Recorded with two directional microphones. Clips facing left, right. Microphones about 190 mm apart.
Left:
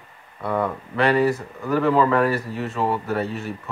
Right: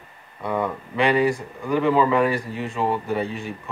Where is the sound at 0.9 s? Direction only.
15° right (ahead or behind); by 3.5 s 5° left (ahead or behind).